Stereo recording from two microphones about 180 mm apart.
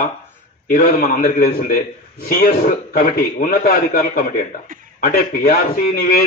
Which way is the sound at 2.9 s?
50° left (ahead or behind).